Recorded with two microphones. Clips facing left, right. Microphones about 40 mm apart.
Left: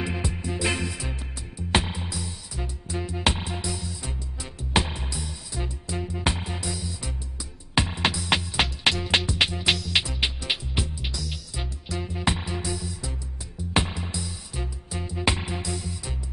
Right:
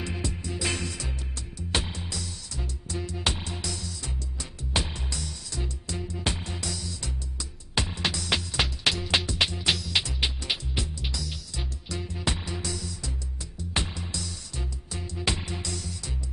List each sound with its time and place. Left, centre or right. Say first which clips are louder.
0.0 s music: left 4 dB; left
9.8 s music: left 3 dB; centre
10.0 s music: left 2 dB; centre